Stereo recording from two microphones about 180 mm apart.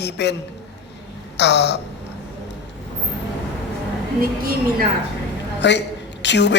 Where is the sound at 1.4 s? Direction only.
70° left (ahead or behind).